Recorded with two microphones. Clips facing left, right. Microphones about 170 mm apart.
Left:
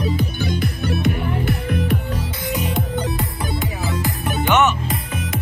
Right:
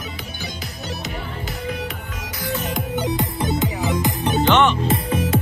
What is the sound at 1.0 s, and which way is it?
Music, 60° left (ahead or behind).